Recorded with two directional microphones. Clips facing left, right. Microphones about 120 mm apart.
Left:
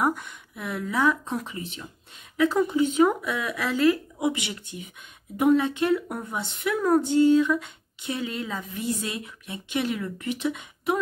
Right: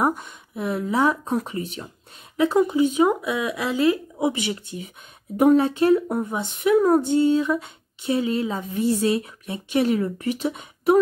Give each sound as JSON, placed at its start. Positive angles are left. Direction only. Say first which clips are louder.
{"t": 0.0, "sound": "speech", "louder": "right 3 dB", "side_deg": -25}
{"t": 1.2, "sound": "speech", "louder": "right 6 dB", "side_deg": -40}
{"t": 2.3, "sound": "a woman's voice", "louder": "right 3 dB", "side_deg": -25}
{"t": 5.4, "sound": "a woman's voice", "louder": "right 4 dB", "side_deg": -40}